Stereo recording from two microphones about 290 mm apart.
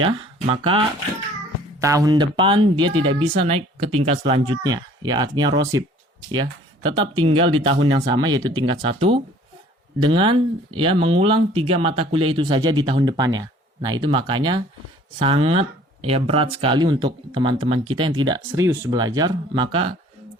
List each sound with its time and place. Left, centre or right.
0.0 s speech: centre
1.8 s speech: centre